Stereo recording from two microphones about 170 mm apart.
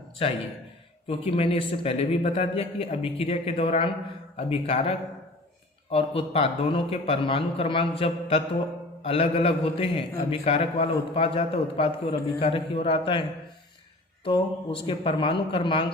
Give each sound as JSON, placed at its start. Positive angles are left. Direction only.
{"t": 0.2, "sound": "speech", "side_deg": 35}
{"t": 14.3, "sound": "speech", "side_deg": 30}